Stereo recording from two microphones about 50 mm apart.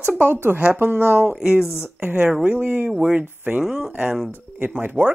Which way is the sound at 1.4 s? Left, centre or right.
Centre.